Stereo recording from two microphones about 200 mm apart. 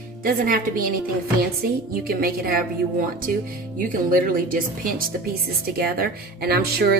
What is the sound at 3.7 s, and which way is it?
A woman's voice, 45° right (ahead or behind).